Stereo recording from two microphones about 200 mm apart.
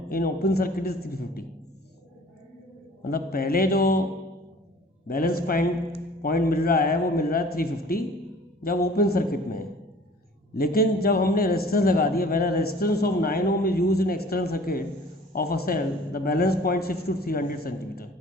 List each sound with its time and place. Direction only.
0.1 s a man's voice: 50° left (ahead or behind)
3.0 s a man's voice: 50° left (ahead or behind)
5.0 s a man's voice: 50° left (ahead or behind)